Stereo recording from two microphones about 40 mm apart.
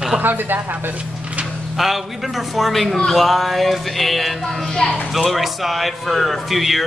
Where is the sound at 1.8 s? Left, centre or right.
Centre.